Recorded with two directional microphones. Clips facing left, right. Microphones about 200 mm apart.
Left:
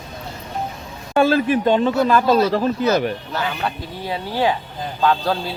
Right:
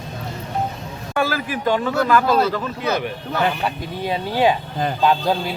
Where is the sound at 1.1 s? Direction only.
25° left (ahead or behind).